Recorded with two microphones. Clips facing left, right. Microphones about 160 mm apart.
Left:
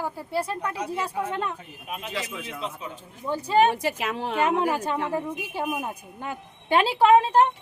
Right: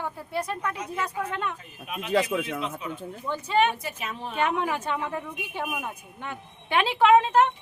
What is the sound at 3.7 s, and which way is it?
Speech, 80° left.